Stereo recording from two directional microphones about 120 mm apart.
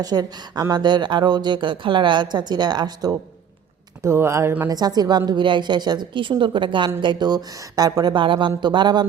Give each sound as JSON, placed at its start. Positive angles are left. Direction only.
{"t": 0.0, "sound": "speech", "side_deg": -35}
{"t": 4.0, "sound": "speech", "side_deg": -20}
{"t": 4.7, "sound": "speech", "side_deg": -35}